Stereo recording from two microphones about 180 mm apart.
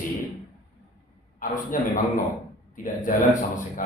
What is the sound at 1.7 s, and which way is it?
A man's voice, 45° left (ahead or behind).